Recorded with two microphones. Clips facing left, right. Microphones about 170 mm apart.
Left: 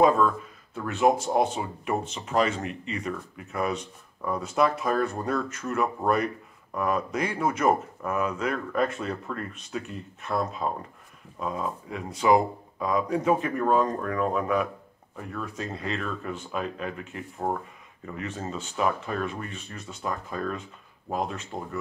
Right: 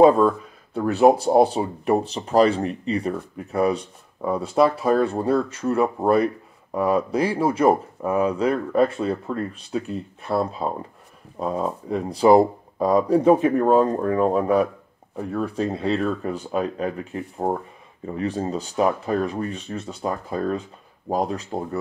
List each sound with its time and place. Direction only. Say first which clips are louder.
0.0 s speech: right 6 dB; 35° right (ahead or behind)